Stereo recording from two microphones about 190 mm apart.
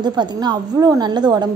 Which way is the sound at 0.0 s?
25° right (ahead or behind).